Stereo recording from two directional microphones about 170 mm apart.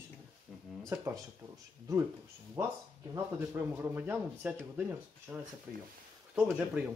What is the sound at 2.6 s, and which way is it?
Speech, 15° right (ahead or behind).